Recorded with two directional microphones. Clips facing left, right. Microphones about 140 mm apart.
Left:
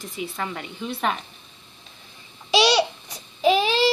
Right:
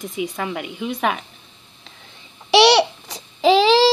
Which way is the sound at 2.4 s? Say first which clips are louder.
Right 6 dB; 70° right (ahead or behind).